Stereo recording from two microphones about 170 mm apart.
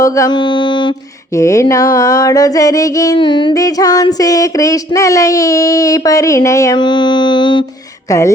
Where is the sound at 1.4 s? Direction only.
20° left (ahead or behind).